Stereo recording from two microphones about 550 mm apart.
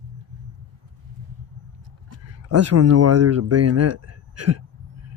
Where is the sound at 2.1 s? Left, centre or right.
Right.